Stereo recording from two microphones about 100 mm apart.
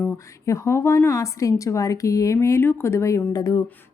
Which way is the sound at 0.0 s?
30° left (ahead or behind).